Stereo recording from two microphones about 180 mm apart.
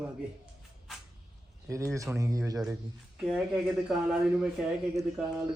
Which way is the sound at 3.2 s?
Centre (ahead or behind).